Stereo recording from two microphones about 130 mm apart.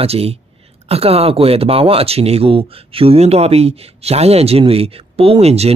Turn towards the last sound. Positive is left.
turn(degrees=-50)  # may be behind; listen again after turning